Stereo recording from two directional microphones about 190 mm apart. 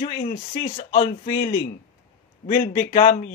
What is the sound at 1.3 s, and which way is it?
Speech, 50° left (ahead or behind).